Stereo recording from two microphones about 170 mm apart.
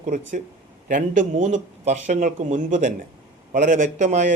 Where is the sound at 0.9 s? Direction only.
45° right (ahead or behind).